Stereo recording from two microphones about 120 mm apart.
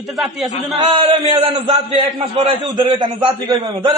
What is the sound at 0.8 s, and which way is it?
Speech, 40° right (ahead or behind).